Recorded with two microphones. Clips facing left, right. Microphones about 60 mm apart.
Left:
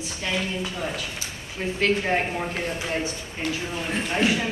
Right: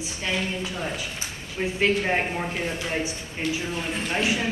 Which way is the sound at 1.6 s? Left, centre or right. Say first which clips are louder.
Right 1 dB; centre.